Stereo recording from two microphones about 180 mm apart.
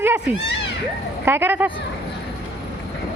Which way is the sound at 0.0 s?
15° right (ahead or behind).